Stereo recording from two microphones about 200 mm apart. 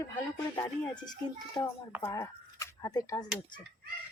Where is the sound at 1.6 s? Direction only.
25° left (ahead or behind).